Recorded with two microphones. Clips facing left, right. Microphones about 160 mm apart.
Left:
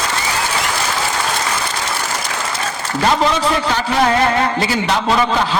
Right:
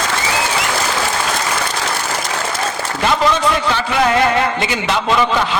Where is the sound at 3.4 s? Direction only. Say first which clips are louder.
Even; 35° left (ahead or behind).